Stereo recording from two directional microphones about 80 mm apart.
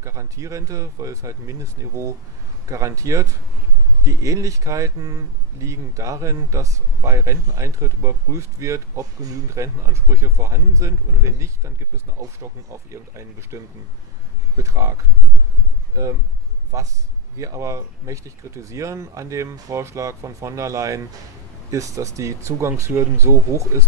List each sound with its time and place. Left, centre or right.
0.0 s speech: right
12.9 s speech: right
14.6 s speech: right